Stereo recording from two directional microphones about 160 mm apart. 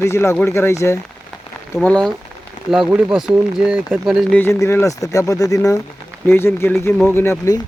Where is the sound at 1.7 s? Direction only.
5° left (ahead or behind).